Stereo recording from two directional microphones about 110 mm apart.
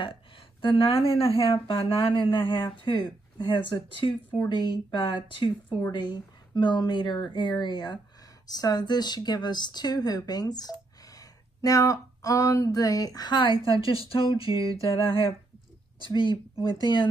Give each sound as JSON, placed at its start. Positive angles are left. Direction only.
{"t": 0.0, "sound": "speech", "side_deg": 50}
{"t": 16.2, "sound": "speech", "side_deg": -45}